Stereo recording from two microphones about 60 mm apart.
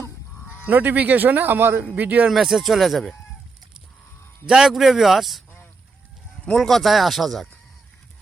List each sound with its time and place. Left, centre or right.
0.4 s speech: right
2.3 s speech: centre
4.4 s speech: centre
6.5 s speech: centre